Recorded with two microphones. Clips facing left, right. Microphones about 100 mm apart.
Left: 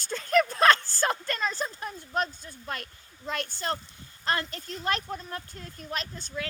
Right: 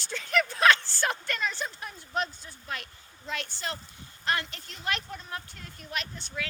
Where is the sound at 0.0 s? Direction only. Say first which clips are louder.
Left 4 dB; 40° left (ahead or behind).